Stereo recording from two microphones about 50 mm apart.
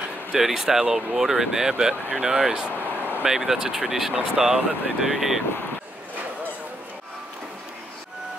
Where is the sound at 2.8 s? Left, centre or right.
Right.